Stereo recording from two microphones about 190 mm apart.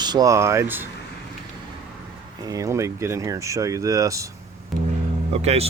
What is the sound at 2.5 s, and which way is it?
Speech, 15° right (ahead or behind).